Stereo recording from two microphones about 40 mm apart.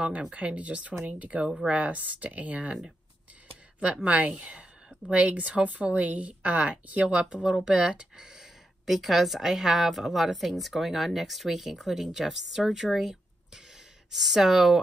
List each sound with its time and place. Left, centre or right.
0.3 s speech: right
3.8 s speech: right
8.8 s speech: centre